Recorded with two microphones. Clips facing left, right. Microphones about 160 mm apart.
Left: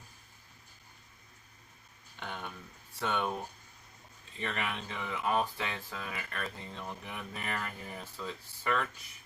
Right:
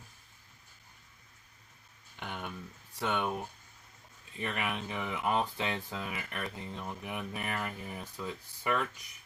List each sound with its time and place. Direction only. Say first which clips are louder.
2.1 s a sound: right 1 dB; 15° right (ahead or behind)
3.0 s speech: right 1 dB; 15° right (ahead or behind)
4.4 s speech: right 1 dB; 15° right (ahead or behind)